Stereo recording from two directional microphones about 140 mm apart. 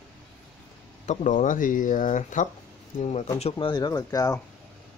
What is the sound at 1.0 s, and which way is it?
Speech, 60° left (ahead or behind).